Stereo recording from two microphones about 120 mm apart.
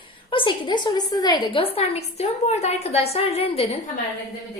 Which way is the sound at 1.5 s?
50° left (ahead or behind).